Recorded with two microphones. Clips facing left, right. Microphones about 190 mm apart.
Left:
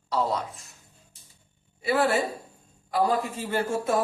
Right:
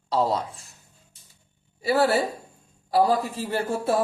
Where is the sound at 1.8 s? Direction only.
40° right (ahead or behind).